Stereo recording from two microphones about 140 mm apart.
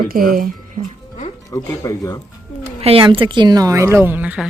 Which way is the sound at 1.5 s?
20° left (ahead or behind).